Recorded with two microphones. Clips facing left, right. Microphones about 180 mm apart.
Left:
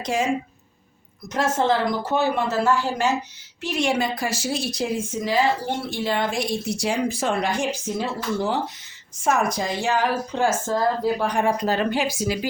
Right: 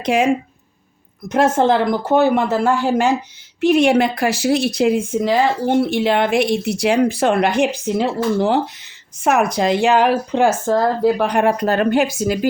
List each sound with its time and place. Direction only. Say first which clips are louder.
0.0 s a woman's voice: right 7 dB; 60° right (ahead or behind)
1.3 s a woman's voice: right 6 dB; 55° right (ahead or behind)